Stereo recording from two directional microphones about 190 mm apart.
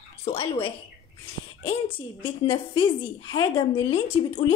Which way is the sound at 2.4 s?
30° left (ahead or behind).